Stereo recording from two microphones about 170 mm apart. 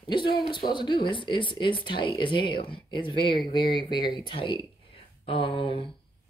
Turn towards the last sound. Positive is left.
turn(degrees=30)  # may be behind; listen again after turning